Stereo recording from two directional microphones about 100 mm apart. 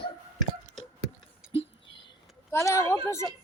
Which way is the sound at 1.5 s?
70° left (ahead or behind).